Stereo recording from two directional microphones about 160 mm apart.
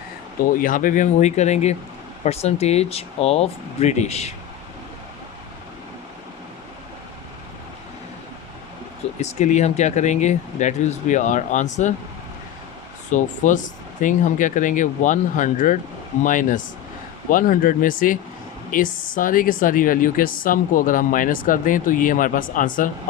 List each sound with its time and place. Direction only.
0.4 s speech: 60° left (ahead or behind); by 4.4 s 40° left (ahead or behind)
9.2 s speech: 50° left (ahead or behind)
13.1 s speech: 50° left (ahead or behind)